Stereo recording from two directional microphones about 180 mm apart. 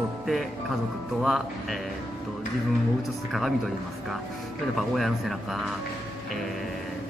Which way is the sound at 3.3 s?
Centre (ahead or behind).